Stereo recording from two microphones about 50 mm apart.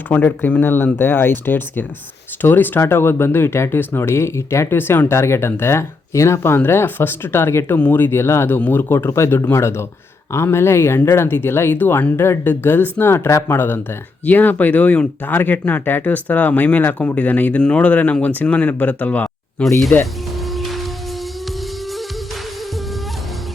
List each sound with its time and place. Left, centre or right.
0.1 s speech: left
0.6 s speech: left
4.7 s speech: left
6.7 s speech: left
7.8 s speech: left
8.1 s speech: left
12.1 s speech: left
14.3 s speech: left
17.6 s speech: left
20.5 s music: centre